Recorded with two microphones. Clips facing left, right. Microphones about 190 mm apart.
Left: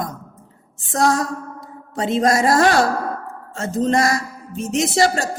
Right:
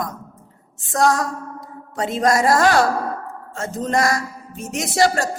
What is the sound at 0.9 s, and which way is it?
A woman's voice, 25° left (ahead or behind).